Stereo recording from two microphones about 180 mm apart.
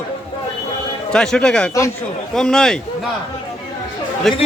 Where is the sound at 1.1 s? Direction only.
5° left (ahead or behind).